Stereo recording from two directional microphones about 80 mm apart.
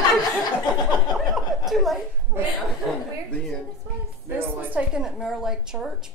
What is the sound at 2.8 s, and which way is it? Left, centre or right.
Chuckle, centre.